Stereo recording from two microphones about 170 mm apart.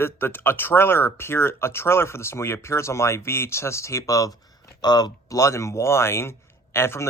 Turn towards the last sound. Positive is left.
turn(degrees=15)  # may be behind; listen again after turning